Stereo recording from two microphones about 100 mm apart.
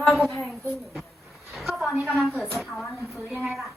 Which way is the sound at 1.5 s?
Centre (ahead or behind).